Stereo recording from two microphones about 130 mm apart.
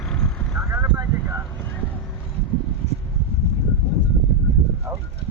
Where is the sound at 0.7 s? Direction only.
20° right (ahead or behind).